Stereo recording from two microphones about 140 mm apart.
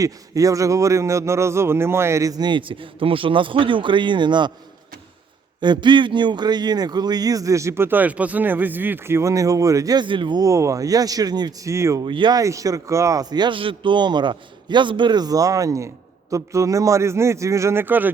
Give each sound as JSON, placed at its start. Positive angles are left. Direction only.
{"t": 0.0, "sound": "a man's voice", "side_deg": -25}
{"t": 5.5, "sound": "a man's voice", "side_deg": -35}
{"t": 12.0, "sound": "a man's voice", "side_deg": -35}